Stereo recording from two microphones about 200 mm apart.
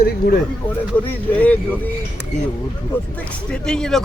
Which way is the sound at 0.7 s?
10° left (ahead or behind).